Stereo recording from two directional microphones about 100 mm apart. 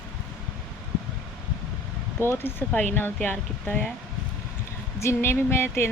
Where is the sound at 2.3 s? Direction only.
20° left (ahead or behind).